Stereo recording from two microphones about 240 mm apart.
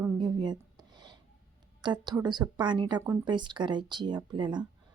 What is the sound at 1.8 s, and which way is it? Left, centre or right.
A woman's voice, centre.